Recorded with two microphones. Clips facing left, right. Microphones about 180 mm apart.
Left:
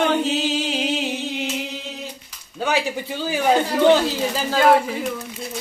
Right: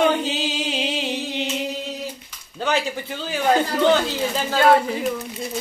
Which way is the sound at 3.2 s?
10° left (ahead or behind).